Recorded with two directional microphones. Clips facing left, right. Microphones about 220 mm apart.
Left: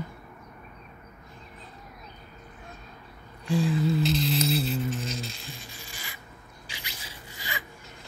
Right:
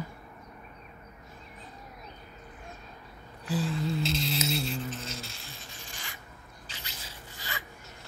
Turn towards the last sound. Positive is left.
turn(degrees=15)  # may be behind; listen again after turning